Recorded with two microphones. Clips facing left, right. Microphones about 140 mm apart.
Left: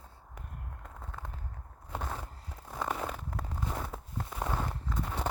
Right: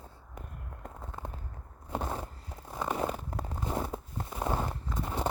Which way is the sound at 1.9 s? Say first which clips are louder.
Right 4 dB; 30° right (ahead or behind).